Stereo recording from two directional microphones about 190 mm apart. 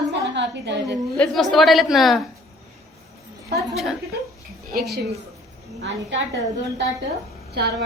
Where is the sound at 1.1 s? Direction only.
5° left (ahead or behind).